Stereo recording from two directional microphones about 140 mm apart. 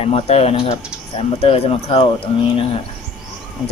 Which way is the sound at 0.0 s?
45° left (ahead or behind).